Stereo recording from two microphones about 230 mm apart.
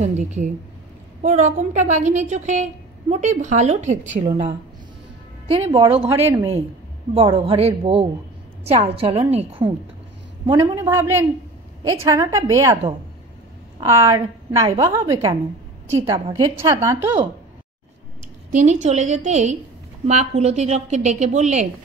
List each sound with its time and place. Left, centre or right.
0.0 s a woman's voice: right
5.5 s a woman's voice: right
6.0 s a woman's voice: centre
7.2 s a woman's voice: right
18.5 s a woman's voice: right